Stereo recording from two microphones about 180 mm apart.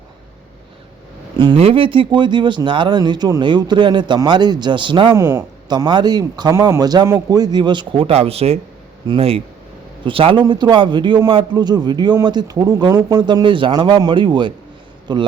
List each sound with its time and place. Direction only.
1.4 s a man's voice: 30° right (ahead or behind)
5.2 s a man's voice: 15° right (ahead or behind)